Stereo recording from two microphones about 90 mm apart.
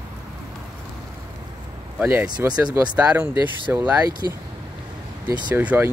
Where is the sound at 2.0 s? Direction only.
20° right (ahead or behind).